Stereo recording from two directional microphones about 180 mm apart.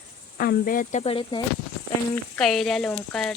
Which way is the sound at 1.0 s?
30° left (ahead or behind).